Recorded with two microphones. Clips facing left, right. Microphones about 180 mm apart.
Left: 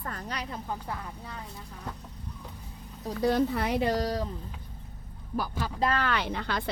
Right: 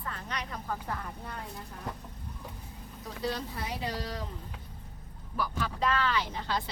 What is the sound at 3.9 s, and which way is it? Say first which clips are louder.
Speech: left 9 dB; 45° left (ahead or behind).